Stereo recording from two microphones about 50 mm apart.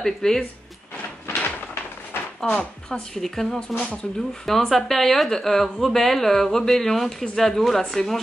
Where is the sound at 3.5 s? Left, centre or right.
Left.